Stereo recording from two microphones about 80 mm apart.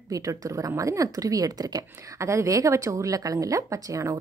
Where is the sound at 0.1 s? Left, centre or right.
Right.